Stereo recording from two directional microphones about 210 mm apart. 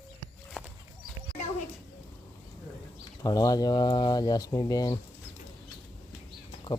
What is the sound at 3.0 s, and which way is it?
Speech, 20° left (ahead or behind).